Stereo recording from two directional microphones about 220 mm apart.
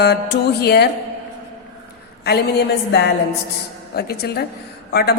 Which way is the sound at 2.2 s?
50° left (ahead or behind).